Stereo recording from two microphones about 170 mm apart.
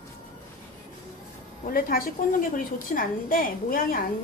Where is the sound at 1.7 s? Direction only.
60° left (ahead or behind).